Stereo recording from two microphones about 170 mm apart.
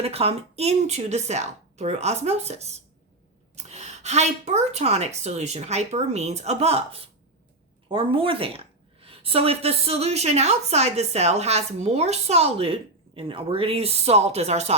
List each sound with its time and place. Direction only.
0.0 s a woman's voice: 35° right (ahead or behind)